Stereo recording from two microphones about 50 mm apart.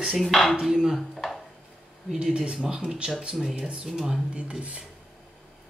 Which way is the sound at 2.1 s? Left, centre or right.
Centre.